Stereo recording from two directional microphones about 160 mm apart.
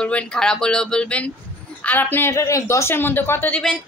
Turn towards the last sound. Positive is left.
turn(degrees=10)  # may be behind; listen again after turning